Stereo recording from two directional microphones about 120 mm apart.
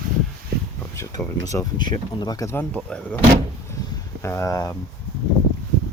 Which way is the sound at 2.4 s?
20° left (ahead or behind).